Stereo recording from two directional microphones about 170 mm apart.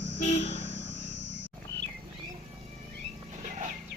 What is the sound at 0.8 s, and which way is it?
Cricket, 90° right.